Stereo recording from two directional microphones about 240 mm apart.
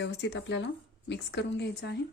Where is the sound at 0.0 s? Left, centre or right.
Left.